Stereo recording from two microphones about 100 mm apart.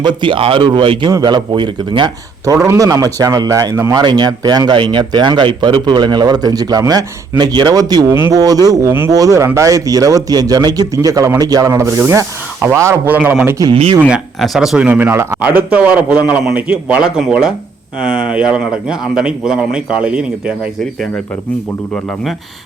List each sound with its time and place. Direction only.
0.0 s a man's voice: 55° right (ahead or behind)
2.6 s a man's voice: 35° right (ahead or behind)
3.9 s a man's voice: 45° right (ahead or behind); by 13.0 s 30° right (ahead or behind)
13.1 s speech: 20° right (ahead or behind)
13.6 s a man's voice: 35° right (ahead or behind)
14.4 s speech: centre (ahead or behind); by 15.4 s 25° right (ahead or behind)
15.4 s speech: 15° right (ahead or behind)